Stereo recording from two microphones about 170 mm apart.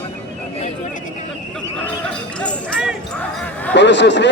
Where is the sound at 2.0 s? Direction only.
5° left (ahead or behind).